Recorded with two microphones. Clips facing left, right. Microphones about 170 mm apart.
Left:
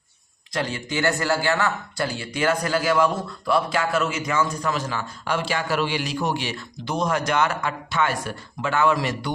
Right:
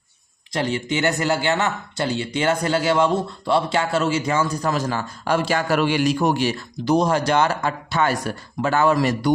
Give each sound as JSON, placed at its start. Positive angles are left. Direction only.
{"t": 0.5, "sound": "a man's voice", "side_deg": -25}